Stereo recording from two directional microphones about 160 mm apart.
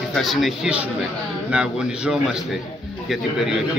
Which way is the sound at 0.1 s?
Centre (ahead or behind).